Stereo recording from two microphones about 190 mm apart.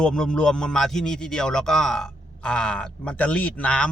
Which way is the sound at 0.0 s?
5° left (ahead or behind).